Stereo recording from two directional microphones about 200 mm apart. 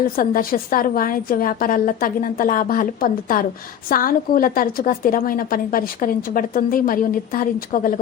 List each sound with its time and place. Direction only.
0.2 s a woman's voice: 45° left (ahead or behind)